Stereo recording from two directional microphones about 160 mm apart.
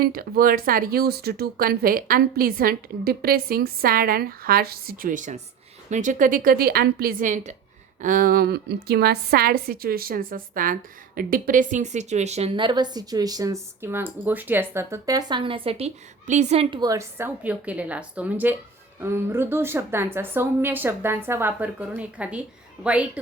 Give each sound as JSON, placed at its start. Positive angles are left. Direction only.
{"t": 0.0, "sound": "a woman's voice", "side_deg": -65}
{"t": 12.5, "sound": "speech", "side_deg": -30}
{"t": 16.8, "sound": "a woman's voice", "side_deg": -20}